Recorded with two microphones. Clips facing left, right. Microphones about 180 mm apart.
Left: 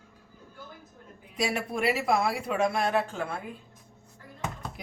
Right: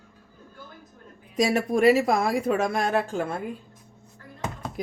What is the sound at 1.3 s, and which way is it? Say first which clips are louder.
Speech: right 7 dB; 45° right (ahead or behind).